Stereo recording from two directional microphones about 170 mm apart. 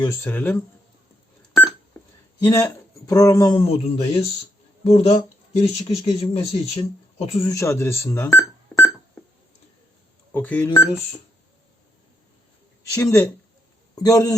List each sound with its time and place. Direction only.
0.0 s speech: 15° left (ahead or behind)
1.4 s beep: 10° left (ahead or behind)
2.4 s a man's voice: 20° left (ahead or behind)
3.6 s speech: 35° left (ahead or behind)
7.4 s speech: 20° left (ahead or behind)
10.3 s speech: 10° left (ahead or behind)
12.8 s a man's voice: 20° left (ahead or behind)